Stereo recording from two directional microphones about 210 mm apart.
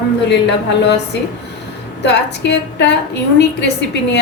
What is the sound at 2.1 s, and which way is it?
Speech, 55° left (ahead or behind).